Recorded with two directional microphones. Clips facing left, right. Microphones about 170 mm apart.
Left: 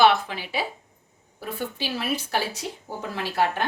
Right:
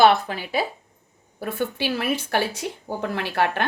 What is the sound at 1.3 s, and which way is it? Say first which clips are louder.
A woman's voice: right 5 dB; 60° right (ahead or behind).